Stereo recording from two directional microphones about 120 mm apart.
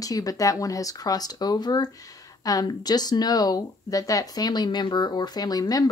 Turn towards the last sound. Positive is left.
turn(degrees=30)  # may be behind; listen again after turning